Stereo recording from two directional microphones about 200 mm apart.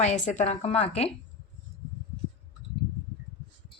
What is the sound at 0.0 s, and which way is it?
A woman's voice, 35° left (ahead or behind).